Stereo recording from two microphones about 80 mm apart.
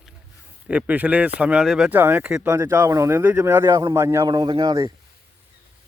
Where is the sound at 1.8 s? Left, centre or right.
Right.